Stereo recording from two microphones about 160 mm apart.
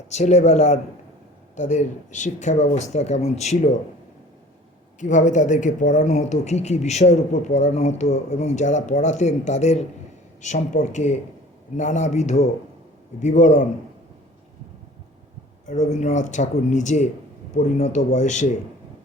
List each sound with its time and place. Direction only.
0.1 s speech: 45° left (ahead or behind)
4.9 s speech: 50° left (ahead or behind)
15.6 s speech: 50° left (ahead or behind)